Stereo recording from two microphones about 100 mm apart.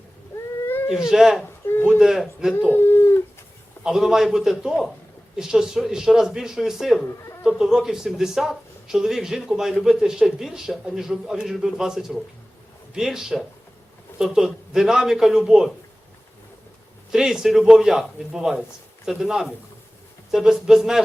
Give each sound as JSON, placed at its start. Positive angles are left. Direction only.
{"t": 0.9, "sound": "speech", "side_deg": -5}
{"t": 1.6, "sound": "a sound", "side_deg": 20}
{"t": 2.0, "sound": "speech", "side_deg": -5}
{"t": 2.6, "sound": "a sound", "side_deg": 20}
{"t": 3.8, "sound": "speech", "side_deg": -5}
{"t": 17.1, "sound": "speech", "side_deg": -5}